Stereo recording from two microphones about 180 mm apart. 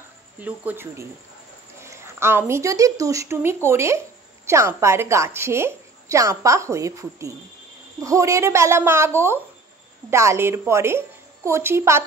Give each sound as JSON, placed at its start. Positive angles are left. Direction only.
{"t": 0.4, "sound": "a woman's voice", "side_deg": -10}